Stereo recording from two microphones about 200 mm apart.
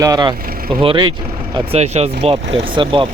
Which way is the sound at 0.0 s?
20° right (ahead or behind).